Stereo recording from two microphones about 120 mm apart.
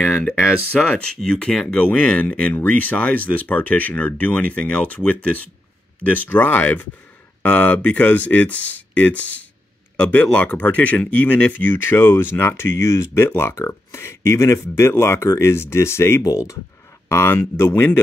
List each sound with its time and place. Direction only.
0.0 s speech: 10° left (ahead or behind)